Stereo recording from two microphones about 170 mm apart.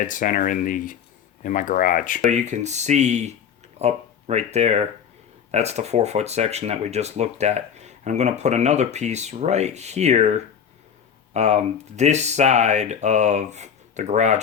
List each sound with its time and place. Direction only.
0.0 s speech: 50° left (ahead or behind)
2.3 s speech: 45° right (ahead or behind)